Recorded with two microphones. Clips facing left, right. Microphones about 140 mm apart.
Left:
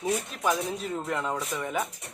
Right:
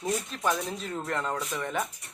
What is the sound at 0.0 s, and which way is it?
Speech, 5° left (ahead or behind).